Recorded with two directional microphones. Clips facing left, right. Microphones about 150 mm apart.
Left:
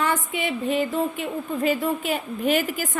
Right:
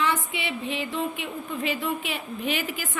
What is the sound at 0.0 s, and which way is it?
Speech, 45° left (ahead or behind).